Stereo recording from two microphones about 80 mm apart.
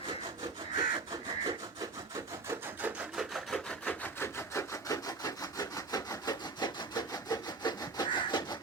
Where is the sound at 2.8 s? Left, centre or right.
Right.